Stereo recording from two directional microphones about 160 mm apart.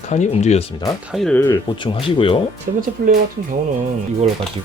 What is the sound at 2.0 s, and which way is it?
Speech, 35° left (ahead or behind).